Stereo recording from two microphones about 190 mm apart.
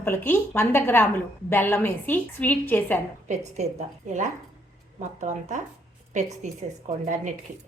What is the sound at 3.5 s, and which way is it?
A woman's voice, 40° right (ahead or behind).